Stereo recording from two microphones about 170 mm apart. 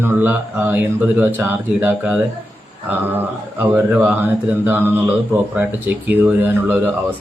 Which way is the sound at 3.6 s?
10° right (ahead or behind).